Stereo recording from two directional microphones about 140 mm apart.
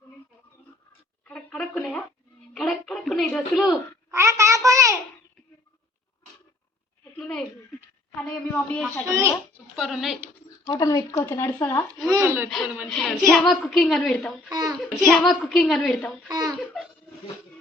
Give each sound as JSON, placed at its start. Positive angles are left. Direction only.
{"t": 1.2, "sound": "a sound", "side_deg": 5}
{"t": 4.1, "sound": "a child's voice", "side_deg": -20}
{"t": 7.2, "sound": "a sound", "side_deg": 5}
{"t": 8.1, "sound": "speech", "side_deg": 10}
{"t": 9.3, "sound": "speech", "side_deg": -5}
{"t": 10.8, "sound": "speech", "side_deg": 25}
{"t": 12.0, "sound": "a child's voice", "side_deg": -20}
{"t": 12.9, "sound": "a woman's voice", "side_deg": 0}
{"t": 14.5, "sound": "a child's voice", "side_deg": -30}
{"t": 15.2, "sound": "a woman's voice", "side_deg": 0}
{"t": 16.3, "sound": "a sound", "side_deg": -25}